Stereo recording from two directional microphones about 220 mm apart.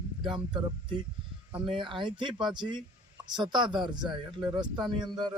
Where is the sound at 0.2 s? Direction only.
20° right (ahead or behind).